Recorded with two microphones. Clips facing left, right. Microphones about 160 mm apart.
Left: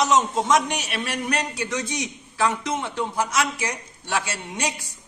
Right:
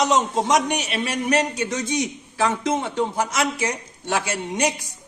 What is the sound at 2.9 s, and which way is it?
A man's voice, 25° right (ahead or behind).